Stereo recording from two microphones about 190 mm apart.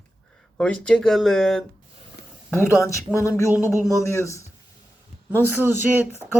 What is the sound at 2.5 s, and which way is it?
Speech, 15° left (ahead or behind).